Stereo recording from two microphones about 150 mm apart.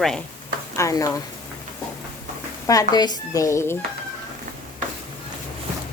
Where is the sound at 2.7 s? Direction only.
25° left (ahead or behind).